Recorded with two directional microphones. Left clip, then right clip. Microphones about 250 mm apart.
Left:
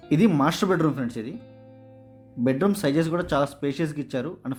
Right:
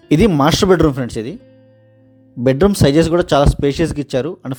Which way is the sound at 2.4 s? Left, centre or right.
Right.